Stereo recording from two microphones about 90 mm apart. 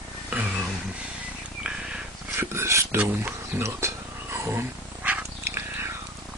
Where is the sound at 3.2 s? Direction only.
25° right (ahead or behind).